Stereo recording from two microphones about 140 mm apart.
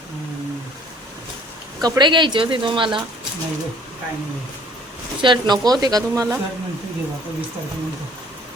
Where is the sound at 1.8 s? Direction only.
30° right (ahead or behind).